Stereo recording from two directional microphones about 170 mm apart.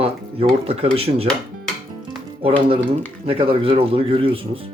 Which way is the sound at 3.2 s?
35° right (ahead or behind).